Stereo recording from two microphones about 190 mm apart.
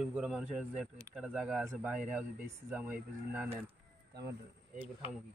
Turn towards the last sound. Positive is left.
turn(degrees=-20)  # may be behind; listen again after turning